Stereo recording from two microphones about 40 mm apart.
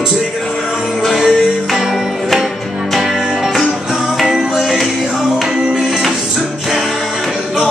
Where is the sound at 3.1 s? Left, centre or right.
Centre.